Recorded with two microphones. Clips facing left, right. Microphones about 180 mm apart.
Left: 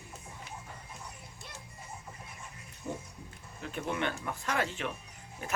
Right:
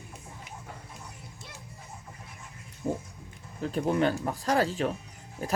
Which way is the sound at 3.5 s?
35° right (ahead or behind).